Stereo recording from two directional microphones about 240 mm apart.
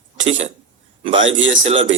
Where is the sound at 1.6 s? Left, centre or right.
Right.